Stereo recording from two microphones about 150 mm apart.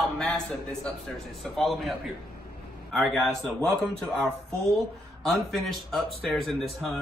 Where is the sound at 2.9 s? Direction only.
Centre (ahead or behind).